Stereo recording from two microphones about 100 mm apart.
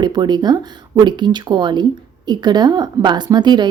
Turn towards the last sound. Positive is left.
turn(degrees=-50)  # may be behind; listen again after turning